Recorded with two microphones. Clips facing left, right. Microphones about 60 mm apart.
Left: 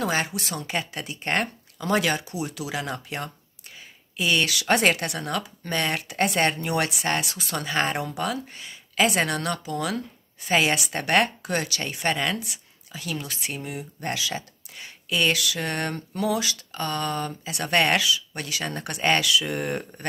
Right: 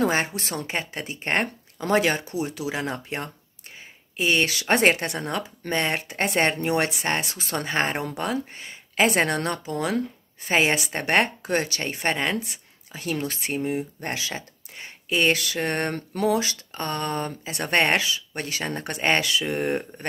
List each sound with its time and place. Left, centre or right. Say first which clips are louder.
0.0 s speech: right 3 dB; right